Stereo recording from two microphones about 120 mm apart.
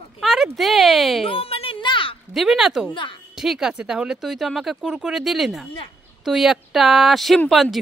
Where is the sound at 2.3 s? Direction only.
Centre (ahead or behind).